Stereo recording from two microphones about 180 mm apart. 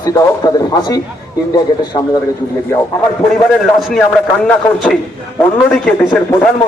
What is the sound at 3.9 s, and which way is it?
A man's voice, 5° left (ahead or behind).